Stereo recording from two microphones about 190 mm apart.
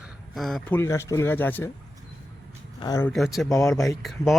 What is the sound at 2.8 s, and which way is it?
Speech, 20° left (ahead or behind).